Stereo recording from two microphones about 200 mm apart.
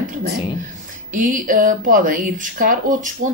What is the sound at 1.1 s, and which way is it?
A woman's voice, 40° right (ahead or behind).